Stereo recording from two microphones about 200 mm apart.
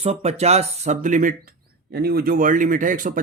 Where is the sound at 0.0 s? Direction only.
30° right (ahead or behind).